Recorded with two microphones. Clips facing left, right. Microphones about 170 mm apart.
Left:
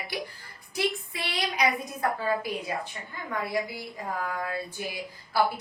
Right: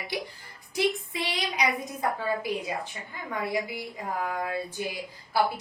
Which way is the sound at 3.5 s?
15° right (ahead or behind).